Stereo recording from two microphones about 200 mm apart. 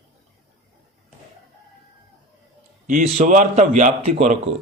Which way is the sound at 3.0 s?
35° right (ahead or behind).